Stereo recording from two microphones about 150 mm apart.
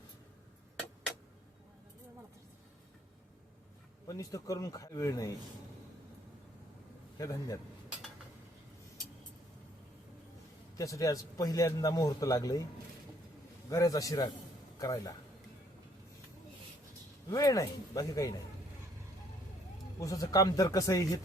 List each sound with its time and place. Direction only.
4.0 s a man's voice: 20° left (ahead or behind)
7.2 s a man's voice: 20° left (ahead or behind)
10.8 s a man's voice: 20° left (ahead or behind)
13.7 s a man's voice: 25° left (ahead or behind)
17.2 s a man's voice: 25° left (ahead or behind)
20.0 s a man's voice: 20° left (ahead or behind)